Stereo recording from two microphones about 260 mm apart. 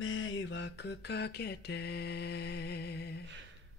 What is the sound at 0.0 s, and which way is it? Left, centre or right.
Mantra, left.